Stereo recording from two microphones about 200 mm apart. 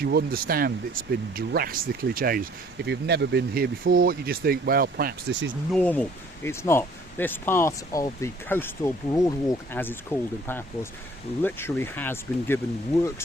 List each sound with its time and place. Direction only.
0.0 s speech: 50° right (ahead or behind)
5.7 s speech: 5° left (ahead or behind)